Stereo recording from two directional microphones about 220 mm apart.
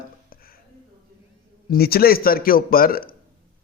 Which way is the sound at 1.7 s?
45° left (ahead or behind).